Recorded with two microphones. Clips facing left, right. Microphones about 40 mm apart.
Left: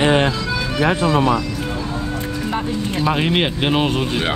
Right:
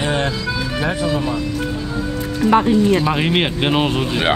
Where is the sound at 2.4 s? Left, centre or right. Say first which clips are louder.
Right 11 dB; right.